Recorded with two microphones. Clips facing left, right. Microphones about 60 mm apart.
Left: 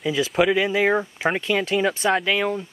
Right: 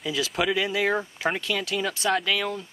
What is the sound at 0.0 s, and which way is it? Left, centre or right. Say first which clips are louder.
Speech: left 6 dB; centre.